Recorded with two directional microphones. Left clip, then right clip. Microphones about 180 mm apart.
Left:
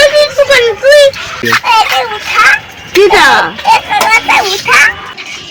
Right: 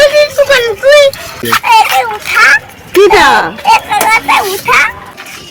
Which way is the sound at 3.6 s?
5° right (ahead or behind).